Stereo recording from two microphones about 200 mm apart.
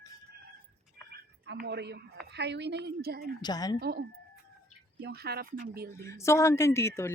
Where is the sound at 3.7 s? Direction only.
50° right (ahead or behind).